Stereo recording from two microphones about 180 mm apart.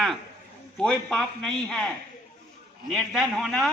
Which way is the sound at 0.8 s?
5° left (ahead or behind).